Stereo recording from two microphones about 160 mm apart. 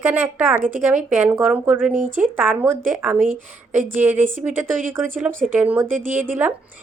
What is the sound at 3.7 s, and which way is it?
Speech, 55° right (ahead or behind).